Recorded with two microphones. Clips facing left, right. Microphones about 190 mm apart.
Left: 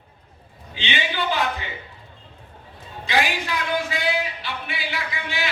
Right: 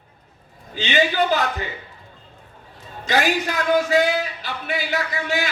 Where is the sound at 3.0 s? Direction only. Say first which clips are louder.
Right 3 dB; 40° right (ahead or behind).